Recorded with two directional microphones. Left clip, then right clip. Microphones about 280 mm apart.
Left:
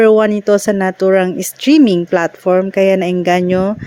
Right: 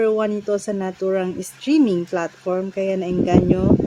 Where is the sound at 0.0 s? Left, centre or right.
Left.